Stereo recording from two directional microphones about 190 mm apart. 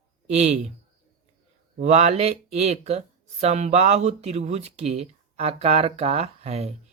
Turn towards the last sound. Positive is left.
turn(degrees=-35)  # may be behind; listen again after turning